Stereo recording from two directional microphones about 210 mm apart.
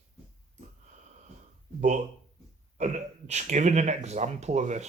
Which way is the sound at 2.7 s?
35° right (ahead or behind).